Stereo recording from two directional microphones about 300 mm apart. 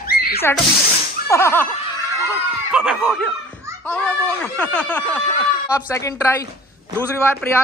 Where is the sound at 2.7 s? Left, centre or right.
Centre.